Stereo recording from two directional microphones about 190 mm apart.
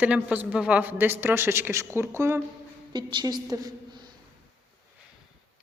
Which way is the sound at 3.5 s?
20° right (ahead or behind).